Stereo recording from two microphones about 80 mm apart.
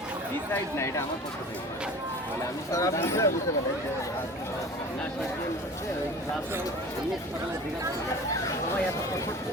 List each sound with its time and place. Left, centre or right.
0.5 s speech: left
2.7 s speech: left